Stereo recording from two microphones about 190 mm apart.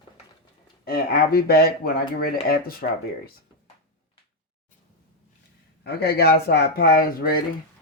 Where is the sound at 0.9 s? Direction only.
55° left (ahead or behind).